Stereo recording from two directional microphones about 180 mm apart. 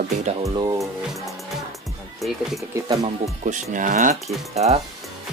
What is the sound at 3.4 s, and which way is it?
Speech, 45° right (ahead or behind).